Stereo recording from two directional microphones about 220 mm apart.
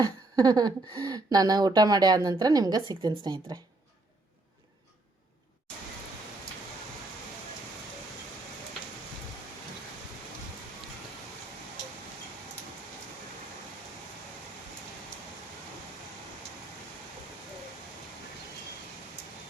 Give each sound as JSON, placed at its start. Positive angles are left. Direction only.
{"t": 0.0, "sound": "speech", "side_deg": -15}